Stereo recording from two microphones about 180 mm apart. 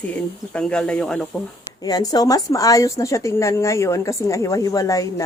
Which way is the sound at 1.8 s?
20° left (ahead or behind).